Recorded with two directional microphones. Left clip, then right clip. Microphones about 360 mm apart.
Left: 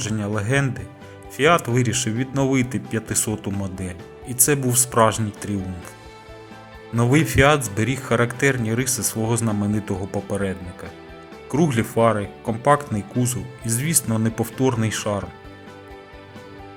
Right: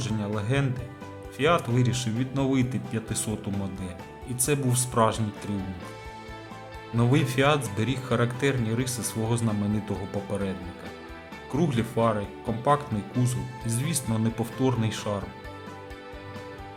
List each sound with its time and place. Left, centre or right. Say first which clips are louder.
0.0 s speech: left 5 dB; centre
6.9 s speech: left 6 dB; centre
11.5 s speech: left 7 dB; centre